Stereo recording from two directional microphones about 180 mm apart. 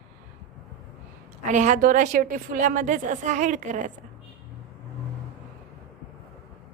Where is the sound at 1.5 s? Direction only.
45° right (ahead or behind).